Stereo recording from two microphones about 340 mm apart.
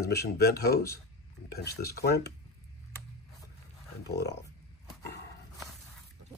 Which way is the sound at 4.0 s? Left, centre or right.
Left.